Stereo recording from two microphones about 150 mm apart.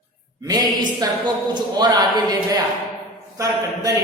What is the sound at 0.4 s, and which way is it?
A man's voice, 25° right (ahead or behind).